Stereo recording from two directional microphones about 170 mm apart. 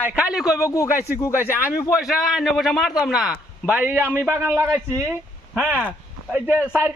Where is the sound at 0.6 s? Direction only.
20° left (ahead or behind).